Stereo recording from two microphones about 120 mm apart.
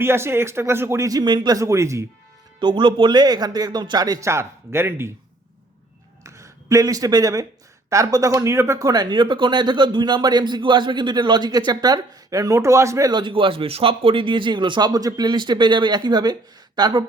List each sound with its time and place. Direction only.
0.0 s speech: 20° right (ahead or behind)
2.6 s speech: 40° right (ahead or behind); by 5.1 s 20° right (ahead or behind)
6.2 s speech: 25° right (ahead or behind)
13.1 s speech: 45° right (ahead or behind)